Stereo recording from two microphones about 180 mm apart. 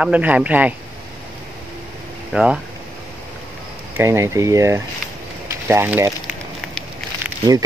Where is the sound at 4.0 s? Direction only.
15° right (ahead or behind).